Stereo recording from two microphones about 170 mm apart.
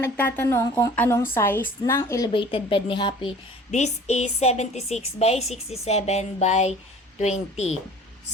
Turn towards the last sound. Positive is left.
turn(degrees=40)  # may be behind; listen again after turning